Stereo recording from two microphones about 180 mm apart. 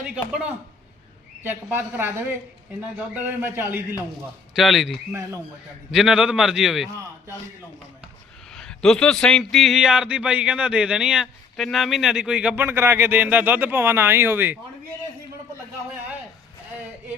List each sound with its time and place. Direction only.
0.3 s a man's voice: 5° right (ahead or behind)
4.5 s a man's voice: centre (ahead or behind)
5.1 s a woman's voice: 15° right (ahead or behind)
5.9 s a man's voice: 5° right (ahead or behind)
8.4 s a man's voice: 5° left (ahead or behind)